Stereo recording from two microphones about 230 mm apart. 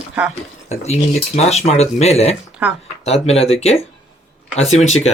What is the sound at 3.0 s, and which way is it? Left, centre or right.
Speech, left.